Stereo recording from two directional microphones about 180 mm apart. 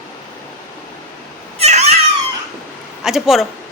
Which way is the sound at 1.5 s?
40° right (ahead or behind).